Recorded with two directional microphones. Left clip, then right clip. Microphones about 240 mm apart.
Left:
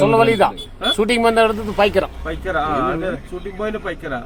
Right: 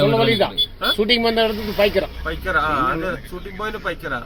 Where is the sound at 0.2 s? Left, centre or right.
Centre.